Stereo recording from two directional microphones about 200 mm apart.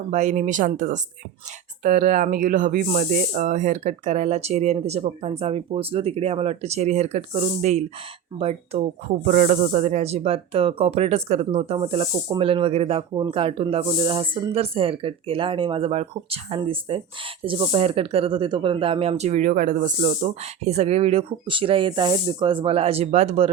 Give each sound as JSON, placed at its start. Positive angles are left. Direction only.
{"t": 0.1, "sound": "speech", "side_deg": -35}